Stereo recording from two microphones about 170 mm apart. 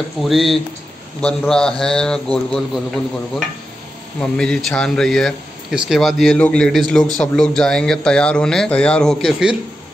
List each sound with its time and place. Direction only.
0.2 s speech: centre (ahead or behind)
4.2 s speech: 5° left (ahead or behind)